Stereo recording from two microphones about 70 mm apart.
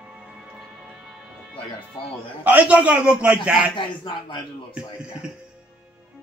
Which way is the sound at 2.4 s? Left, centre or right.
Right.